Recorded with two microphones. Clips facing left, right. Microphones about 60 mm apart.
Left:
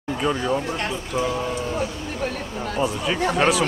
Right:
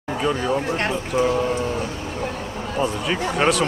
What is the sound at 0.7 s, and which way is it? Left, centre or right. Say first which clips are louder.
Speech: right 4 dB; right.